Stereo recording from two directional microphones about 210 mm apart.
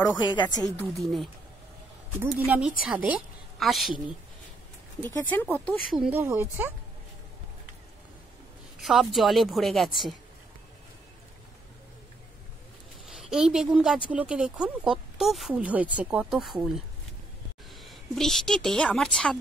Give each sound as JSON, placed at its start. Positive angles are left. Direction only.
{"t": 0.0, "sound": "a woman's voice", "side_deg": 20}
{"t": 0.7, "sound": "speech", "side_deg": 0}
{"t": 2.3, "sound": "a woman's voice", "side_deg": -10}
{"t": 5.0, "sound": "speech", "side_deg": 10}
{"t": 8.8, "sound": "speech", "side_deg": 0}
{"t": 13.2, "sound": "a woman's voice", "side_deg": -5}